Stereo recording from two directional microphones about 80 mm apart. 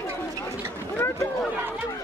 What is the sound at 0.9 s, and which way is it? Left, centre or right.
Speech, left.